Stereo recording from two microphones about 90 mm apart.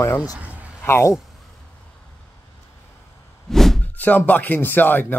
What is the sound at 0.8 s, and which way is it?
Speech, 30° left (ahead or behind).